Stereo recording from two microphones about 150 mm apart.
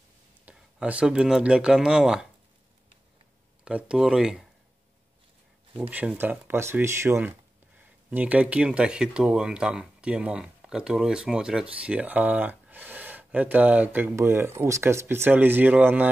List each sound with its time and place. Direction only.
0.5 s speech: 10° right (ahead or behind)
3.6 s speech: 5° right (ahead or behind)
5.8 s speech: 10° right (ahead or behind)